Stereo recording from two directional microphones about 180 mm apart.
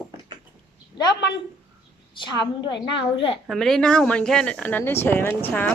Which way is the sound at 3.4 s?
Centre (ahead or behind).